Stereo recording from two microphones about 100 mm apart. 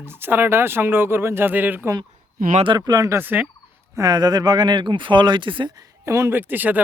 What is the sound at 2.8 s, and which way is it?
Speech, 35° right (ahead or behind).